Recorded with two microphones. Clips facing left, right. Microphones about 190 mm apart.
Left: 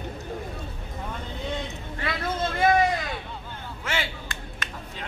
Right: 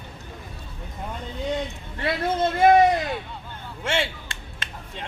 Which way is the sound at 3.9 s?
30° right (ahead or behind).